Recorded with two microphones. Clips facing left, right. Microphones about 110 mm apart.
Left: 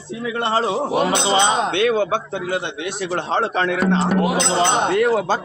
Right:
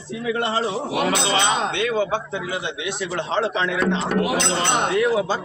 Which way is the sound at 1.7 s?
60° left (ahead or behind).